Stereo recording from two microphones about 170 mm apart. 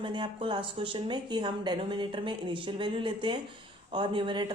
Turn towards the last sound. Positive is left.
turn(degrees=-30)  # may be behind; listen again after turning